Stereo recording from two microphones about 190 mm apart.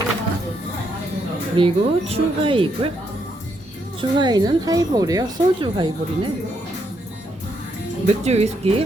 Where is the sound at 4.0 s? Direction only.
25° right (ahead or behind).